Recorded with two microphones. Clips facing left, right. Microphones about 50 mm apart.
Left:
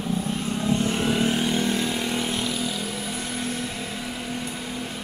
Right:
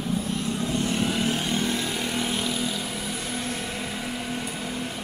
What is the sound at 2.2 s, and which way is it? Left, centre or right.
Vehicle, centre.